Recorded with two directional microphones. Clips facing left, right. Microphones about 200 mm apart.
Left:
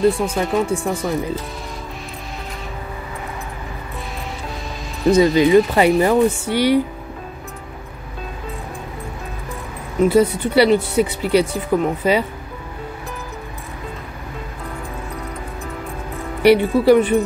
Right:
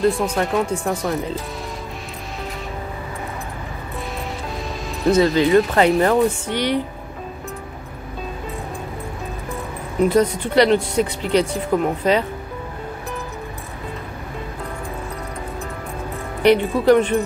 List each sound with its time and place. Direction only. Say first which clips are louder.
0.0 s speech: left 1 dB; 5° left (ahead or behind)
5.2 s speech: left 3 dB; 15° left (ahead or behind)
10.0 s speech: left 2 dB; 5° left (ahead or behind)
16.4 s speech: left 2 dB; 10° left (ahead or behind)